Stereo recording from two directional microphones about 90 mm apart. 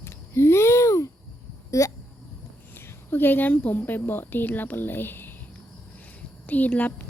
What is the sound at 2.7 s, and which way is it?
A woman's voice, 25° left (ahead or behind).